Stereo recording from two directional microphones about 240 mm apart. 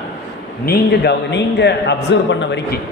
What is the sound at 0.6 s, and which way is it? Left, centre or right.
A man's voice, left.